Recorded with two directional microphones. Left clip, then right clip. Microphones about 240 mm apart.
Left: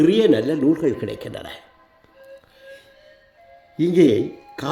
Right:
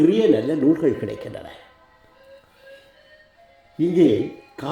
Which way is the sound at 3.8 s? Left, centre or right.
Centre.